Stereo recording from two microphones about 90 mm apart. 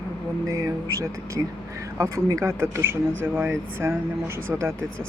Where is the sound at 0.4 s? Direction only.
40° right (ahead or behind).